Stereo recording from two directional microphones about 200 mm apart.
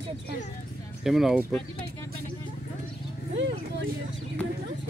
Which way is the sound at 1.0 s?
Centre (ahead or behind).